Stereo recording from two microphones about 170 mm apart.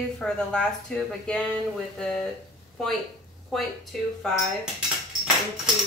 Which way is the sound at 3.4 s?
Centre (ahead or behind).